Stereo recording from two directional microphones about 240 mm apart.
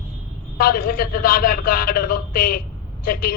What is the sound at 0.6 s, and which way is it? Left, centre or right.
Speech, left.